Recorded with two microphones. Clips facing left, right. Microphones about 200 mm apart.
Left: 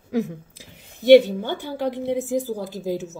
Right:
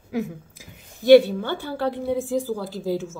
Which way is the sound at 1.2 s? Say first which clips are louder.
Even; 15° left (ahead or behind).